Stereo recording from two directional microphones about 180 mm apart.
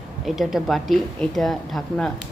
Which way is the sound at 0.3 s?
Centre (ahead or behind).